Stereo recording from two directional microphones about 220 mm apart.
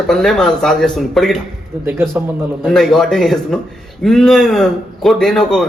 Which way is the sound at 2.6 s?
Centre (ahead or behind).